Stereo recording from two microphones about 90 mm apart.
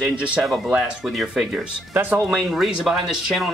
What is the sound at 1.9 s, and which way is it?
Speech, 25° right (ahead or behind).